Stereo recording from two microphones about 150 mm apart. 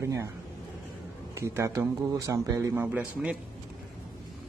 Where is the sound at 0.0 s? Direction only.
20° right (ahead or behind).